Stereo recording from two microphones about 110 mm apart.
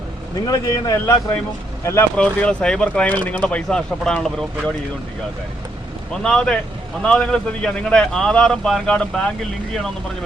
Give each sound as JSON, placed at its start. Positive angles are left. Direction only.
{"t": 0.7, "sound": "speech", "side_deg": 30}
{"t": 2.1, "sound": "a man's voice", "side_deg": 10}
{"t": 6.2, "sound": "a man's voice", "side_deg": 5}